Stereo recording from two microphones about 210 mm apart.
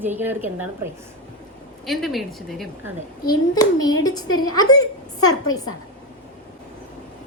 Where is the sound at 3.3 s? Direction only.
20° left (ahead or behind).